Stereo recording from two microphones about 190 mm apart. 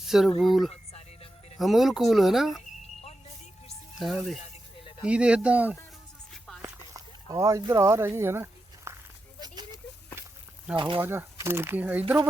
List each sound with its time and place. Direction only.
0.0 s speech: centre (ahead or behind)
0.7 s music: 35° left (ahead or behind)
1.5 s speech: centre (ahead or behind)
2.6 s a sound: 35° left (ahead or behind)
3.9 s speech: centre (ahead or behind)
6.6 s a sound: 20° right (ahead or behind)
10.8 s speech: 25° right (ahead or behind)
11.0 s speech: 10° right (ahead or behind)